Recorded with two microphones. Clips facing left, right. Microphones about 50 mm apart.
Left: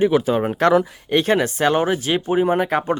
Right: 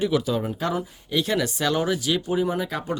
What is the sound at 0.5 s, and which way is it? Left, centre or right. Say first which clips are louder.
Speech: left 11 dB; left.